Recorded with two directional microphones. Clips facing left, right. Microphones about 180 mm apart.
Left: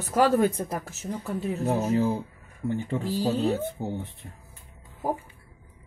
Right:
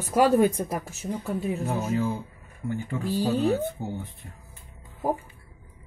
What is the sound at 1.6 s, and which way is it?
Speech, 35° left (ahead or behind).